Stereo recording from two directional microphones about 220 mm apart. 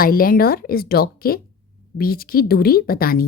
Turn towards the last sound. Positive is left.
turn(degrees=40)  # may be behind; listen again after turning